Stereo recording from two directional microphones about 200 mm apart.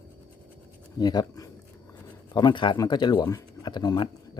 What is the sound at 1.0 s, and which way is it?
Speech, 20° left (ahead or behind).